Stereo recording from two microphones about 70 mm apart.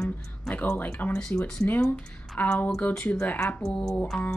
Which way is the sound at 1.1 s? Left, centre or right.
Centre.